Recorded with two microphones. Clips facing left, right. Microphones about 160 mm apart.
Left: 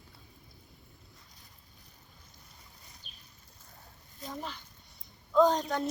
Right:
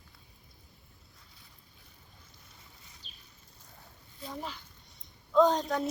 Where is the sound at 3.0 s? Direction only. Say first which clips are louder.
Even; 55° left (ahead or behind).